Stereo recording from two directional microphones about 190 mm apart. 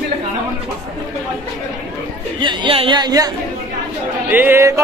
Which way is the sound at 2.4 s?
25° right (ahead or behind).